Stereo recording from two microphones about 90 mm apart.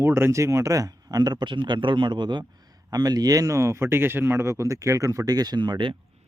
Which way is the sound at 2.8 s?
45° right (ahead or behind).